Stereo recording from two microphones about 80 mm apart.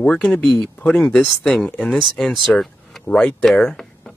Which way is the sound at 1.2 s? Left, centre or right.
Centre.